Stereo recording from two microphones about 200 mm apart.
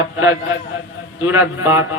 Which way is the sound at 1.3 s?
10° right (ahead or behind).